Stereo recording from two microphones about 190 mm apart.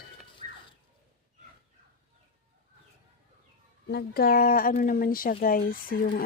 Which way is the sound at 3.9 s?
55° left (ahead or behind).